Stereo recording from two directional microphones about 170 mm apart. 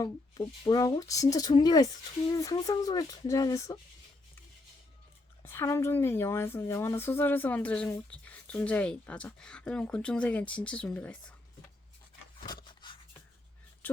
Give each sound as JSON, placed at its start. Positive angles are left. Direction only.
{"t": 0.0, "sound": "speech", "side_deg": 20}
{"t": 5.4, "sound": "a woman's voice", "side_deg": 15}
{"t": 12.5, "sound": "a sound", "side_deg": 25}